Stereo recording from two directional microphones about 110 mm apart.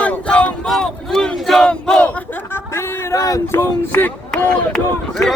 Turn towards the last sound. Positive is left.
turn(degrees=0)  # may be behind; listen again after turning